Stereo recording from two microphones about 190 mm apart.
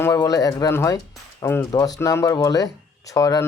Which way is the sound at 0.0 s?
20° left (ahead or behind).